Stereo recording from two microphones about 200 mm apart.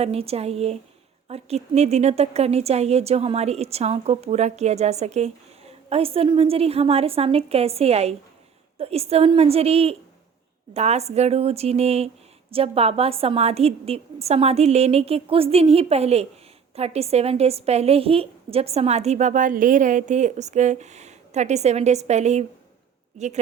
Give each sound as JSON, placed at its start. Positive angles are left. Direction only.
{"t": 0.0, "sound": "a woman's voice", "side_deg": -30}